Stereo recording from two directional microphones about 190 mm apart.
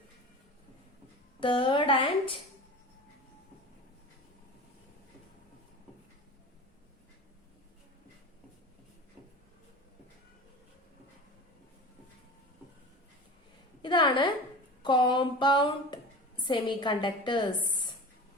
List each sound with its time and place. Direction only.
1.4 s a woman's voice: 25° left (ahead or behind)
13.8 s a sound: 25° left (ahead or behind)
14.8 s a woman's voice: 25° left (ahead or behind)